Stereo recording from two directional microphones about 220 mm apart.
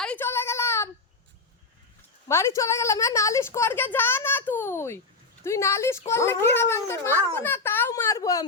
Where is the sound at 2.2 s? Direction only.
15° left (ahead or behind).